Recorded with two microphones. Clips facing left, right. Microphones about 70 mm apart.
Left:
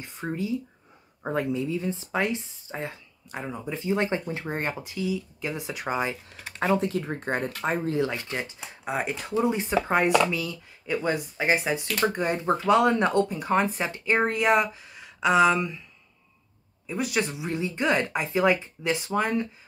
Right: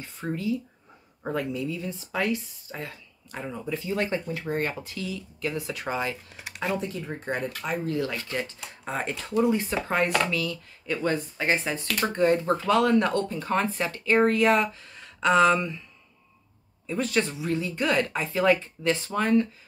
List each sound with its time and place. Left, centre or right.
0.0 s speech: centre
6.6 s speech: left
7.6 s speech: left; by 15.8 s centre
16.8 s speech: centre